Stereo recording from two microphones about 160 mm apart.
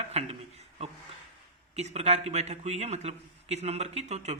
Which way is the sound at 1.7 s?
45° right (ahead or behind).